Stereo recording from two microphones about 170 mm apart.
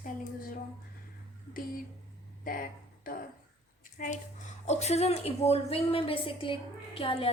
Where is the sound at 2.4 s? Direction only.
55° left (ahead or behind).